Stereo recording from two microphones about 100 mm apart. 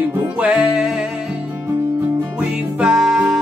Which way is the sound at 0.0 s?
10° right (ahead or behind).